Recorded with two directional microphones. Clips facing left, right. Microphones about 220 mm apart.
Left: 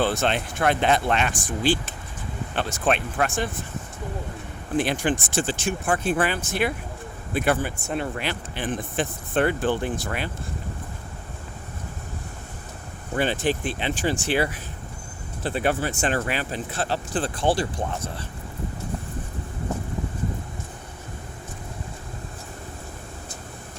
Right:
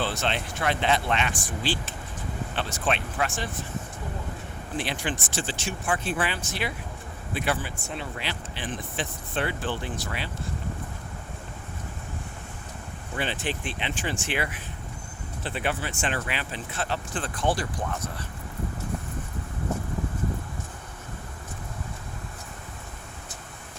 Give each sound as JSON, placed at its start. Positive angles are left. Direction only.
{"t": 0.0, "sound": "speech", "side_deg": 50}
{"t": 4.8, "sound": "speech", "side_deg": 45}
{"t": 13.1, "sound": "speech", "side_deg": 40}